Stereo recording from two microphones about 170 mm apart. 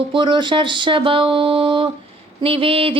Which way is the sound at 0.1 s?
30° right (ahead or behind).